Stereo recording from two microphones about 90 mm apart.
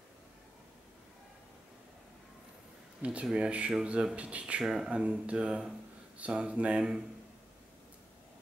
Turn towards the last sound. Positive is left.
turn(degrees=-10)  # may be behind; listen again after turning